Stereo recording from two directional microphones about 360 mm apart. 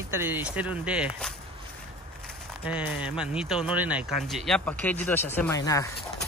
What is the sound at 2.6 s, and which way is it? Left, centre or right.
Speech, centre.